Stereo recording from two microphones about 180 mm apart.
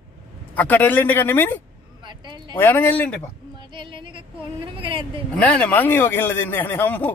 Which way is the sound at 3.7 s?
25° right (ahead or behind).